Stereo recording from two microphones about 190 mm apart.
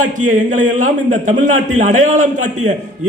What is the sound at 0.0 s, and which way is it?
A man's voice, 40° right (ahead or behind).